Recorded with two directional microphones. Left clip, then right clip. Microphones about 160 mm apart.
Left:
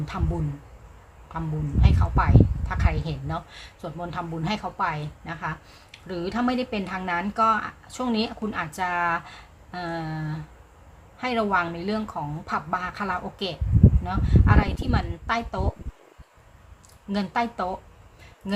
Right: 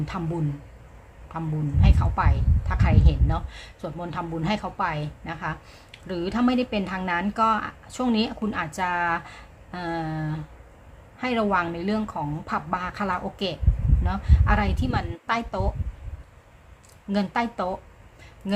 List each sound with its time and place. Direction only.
0.1 s a woman's voice: 10° right (ahead or behind)
17.1 s a woman's voice: 15° right (ahead or behind)